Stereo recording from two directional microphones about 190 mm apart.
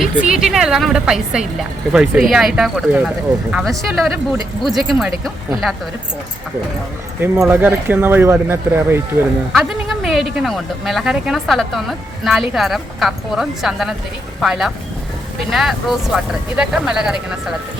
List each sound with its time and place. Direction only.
0.0 s speech: 5° right (ahead or behind)
7.2 s speech: 5° right (ahead or behind)